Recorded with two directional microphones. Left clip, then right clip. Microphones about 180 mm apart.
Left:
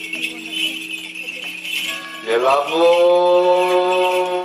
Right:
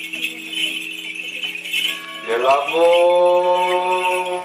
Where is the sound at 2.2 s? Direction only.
25° right (ahead or behind).